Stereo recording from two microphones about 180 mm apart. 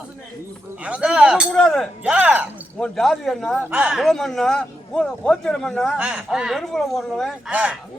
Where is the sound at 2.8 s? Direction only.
Centre (ahead or behind).